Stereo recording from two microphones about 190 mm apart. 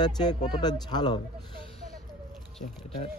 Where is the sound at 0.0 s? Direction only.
20° left (ahead or behind).